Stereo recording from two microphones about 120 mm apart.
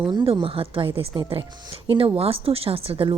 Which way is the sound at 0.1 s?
40° right (ahead or behind).